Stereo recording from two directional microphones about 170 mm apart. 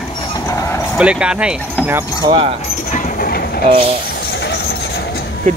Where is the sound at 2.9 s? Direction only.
55° left (ahead or behind).